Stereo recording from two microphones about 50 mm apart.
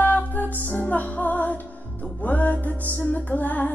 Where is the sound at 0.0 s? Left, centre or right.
Left.